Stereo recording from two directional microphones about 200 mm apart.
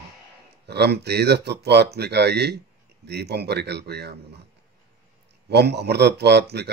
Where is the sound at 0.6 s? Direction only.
55° right (ahead or behind).